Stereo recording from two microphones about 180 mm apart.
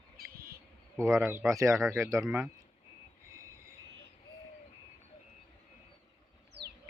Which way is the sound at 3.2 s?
15° right (ahead or behind).